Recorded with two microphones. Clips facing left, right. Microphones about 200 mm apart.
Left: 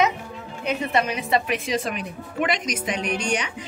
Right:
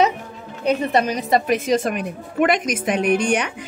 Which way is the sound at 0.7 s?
35° right (ahead or behind).